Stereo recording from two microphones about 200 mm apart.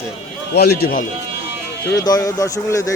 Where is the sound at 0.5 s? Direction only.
55° left (ahead or behind).